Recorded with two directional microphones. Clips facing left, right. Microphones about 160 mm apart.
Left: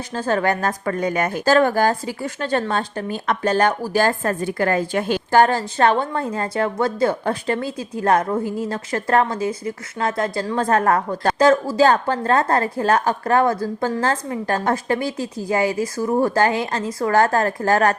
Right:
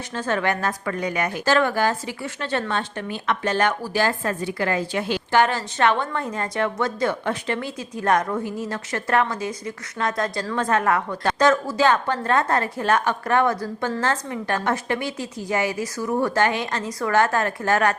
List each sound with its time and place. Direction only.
0.1 s a woman's voice: 35° left (ahead or behind)